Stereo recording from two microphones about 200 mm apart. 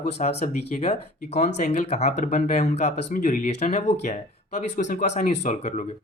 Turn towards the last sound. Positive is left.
turn(degrees=35)  # may be behind; listen again after turning